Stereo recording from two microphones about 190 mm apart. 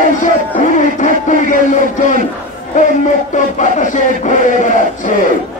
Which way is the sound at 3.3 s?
40° left (ahead or behind).